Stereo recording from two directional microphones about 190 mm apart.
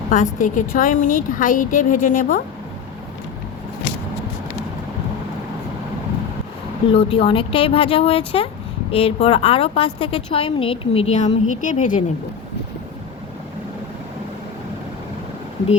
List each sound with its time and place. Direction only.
0.1 s a woman's voice: 45° left (ahead or behind)
6.9 s a woman's voice: 30° left (ahead or behind)